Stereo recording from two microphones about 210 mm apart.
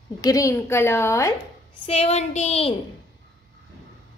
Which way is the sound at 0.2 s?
15° left (ahead or behind).